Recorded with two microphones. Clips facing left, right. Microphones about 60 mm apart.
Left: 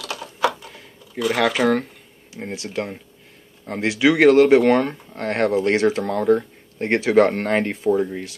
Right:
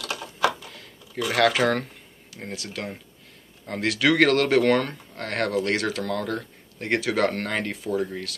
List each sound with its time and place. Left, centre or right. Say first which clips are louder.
1.3 s speech: left 2 dB; centre
2.3 s speech: left 7 dB; left